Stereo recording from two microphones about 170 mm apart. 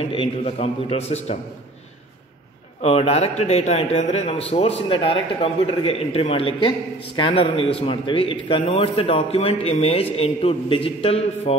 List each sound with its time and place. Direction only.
0.1 s a man's voice: 35° left (ahead or behind)
2.8 s a man's voice: 40° left (ahead or behind)